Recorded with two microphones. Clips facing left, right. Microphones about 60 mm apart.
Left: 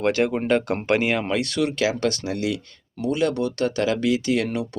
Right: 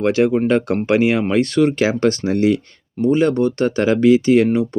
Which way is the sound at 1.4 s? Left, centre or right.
Right.